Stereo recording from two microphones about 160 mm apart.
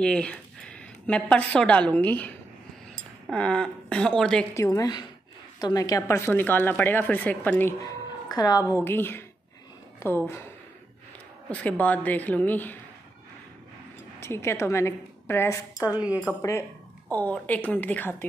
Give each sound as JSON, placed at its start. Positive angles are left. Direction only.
{"t": 0.0, "sound": "speech", "side_deg": 5}
{"t": 4.6, "sound": "a woman's voice", "side_deg": 20}
{"t": 7.8, "sound": "a woman's voice", "side_deg": 25}
{"t": 11.6, "sound": "a woman's voice", "side_deg": 10}
{"t": 14.2, "sound": "a woman's voice", "side_deg": 15}
{"t": 15.8, "sound": "a woman's voice", "side_deg": -10}
{"t": 16.3, "sound": "a woman's voice", "side_deg": 20}